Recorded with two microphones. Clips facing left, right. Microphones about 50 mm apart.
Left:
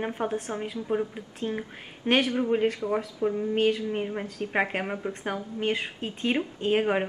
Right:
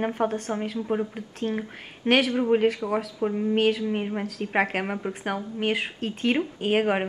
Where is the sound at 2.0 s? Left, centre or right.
Centre.